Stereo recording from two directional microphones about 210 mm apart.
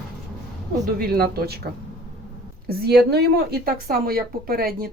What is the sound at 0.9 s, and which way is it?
Speech, 45° right (ahead or behind).